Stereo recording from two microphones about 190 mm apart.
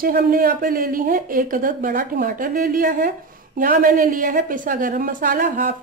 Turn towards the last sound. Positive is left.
turn(degrees=-50)  # may be behind; listen again after turning